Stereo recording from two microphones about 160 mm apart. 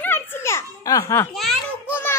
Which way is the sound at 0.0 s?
15° left (ahead or behind).